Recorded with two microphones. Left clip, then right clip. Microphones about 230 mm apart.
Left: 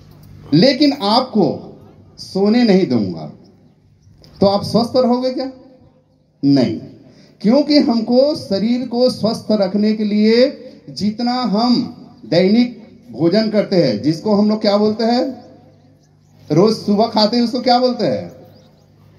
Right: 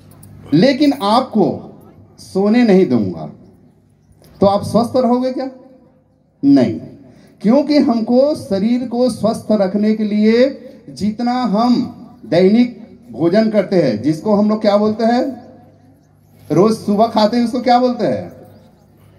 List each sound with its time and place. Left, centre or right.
0.5 s speech: left
4.4 s a man's voice: left
16.4 s a man's voice: left